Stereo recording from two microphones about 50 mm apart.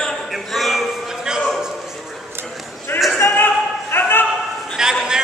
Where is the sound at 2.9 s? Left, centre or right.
Left.